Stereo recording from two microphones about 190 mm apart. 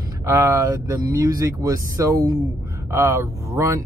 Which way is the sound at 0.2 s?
15° right (ahead or behind).